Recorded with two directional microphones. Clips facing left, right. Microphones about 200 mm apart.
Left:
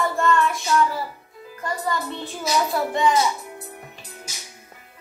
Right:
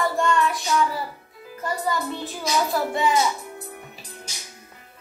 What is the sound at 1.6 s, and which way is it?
A child's voice, 5° right (ahead or behind).